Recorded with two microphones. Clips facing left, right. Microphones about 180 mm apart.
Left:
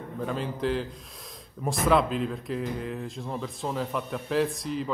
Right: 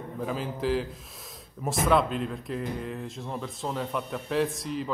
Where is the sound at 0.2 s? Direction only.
Centre (ahead or behind).